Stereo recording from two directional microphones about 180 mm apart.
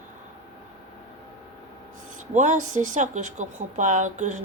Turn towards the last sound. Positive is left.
turn(degrees=-40)  # may be behind; listen again after turning